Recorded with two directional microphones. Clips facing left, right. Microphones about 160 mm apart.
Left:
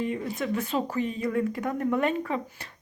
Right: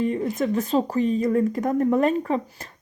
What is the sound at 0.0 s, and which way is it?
Speech, 40° right (ahead or behind).